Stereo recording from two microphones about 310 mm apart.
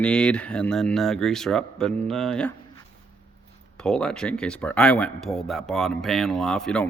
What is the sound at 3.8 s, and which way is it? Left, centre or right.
Speech, centre.